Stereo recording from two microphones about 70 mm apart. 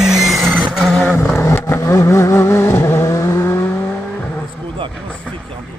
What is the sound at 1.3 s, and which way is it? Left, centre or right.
Vehicle, left.